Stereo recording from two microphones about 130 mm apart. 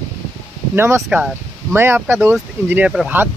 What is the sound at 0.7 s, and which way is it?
Speech, 20° right (ahead or behind).